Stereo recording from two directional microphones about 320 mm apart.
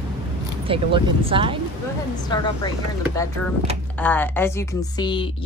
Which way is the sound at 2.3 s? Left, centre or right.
Centre.